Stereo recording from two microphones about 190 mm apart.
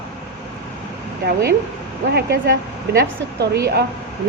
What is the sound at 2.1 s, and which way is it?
A woman's voice, 50° right (ahead or behind).